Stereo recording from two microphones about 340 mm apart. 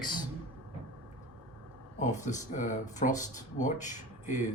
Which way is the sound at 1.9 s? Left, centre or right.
Left.